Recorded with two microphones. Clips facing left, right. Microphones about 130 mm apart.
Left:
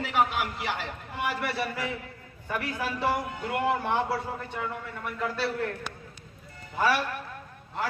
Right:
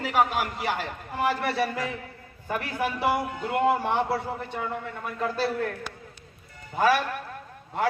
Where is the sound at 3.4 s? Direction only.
25° right (ahead or behind).